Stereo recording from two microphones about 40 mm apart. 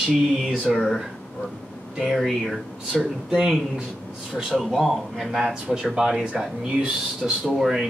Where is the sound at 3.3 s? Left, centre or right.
Centre.